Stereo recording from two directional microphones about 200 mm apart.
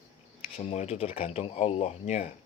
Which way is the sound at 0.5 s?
30° left (ahead or behind).